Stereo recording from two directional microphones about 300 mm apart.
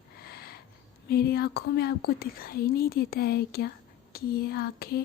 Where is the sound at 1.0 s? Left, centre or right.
Left.